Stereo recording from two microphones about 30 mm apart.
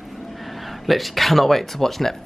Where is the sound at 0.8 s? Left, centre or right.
Centre.